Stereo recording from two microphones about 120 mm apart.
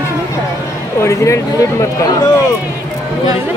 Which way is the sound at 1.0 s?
25° left (ahead or behind).